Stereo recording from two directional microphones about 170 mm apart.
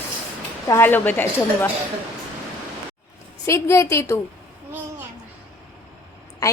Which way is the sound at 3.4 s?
15° left (ahead or behind).